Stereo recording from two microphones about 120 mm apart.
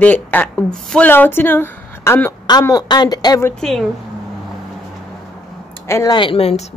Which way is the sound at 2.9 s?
35° left (ahead or behind).